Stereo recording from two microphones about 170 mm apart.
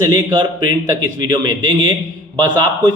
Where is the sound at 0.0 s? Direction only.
25° right (ahead or behind).